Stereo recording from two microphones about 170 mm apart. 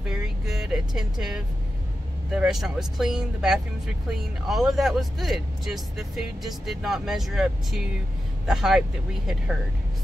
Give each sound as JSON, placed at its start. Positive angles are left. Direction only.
{"t": 0.1, "sound": "vehicle", "side_deg": 0}
{"t": 2.3, "sound": "speech", "side_deg": 0}